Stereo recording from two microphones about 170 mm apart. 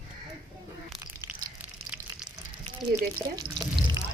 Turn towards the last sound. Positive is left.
turn(degrees=-25)  # may be behind; listen again after turning